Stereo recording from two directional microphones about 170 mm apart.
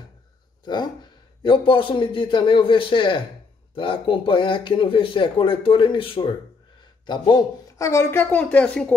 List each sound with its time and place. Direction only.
0.7 s a man's voice: 25° left (ahead or behind); by 8.9 s 5° left (ahead or behind)